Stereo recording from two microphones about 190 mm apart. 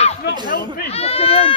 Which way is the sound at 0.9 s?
30° left (ahead or behind).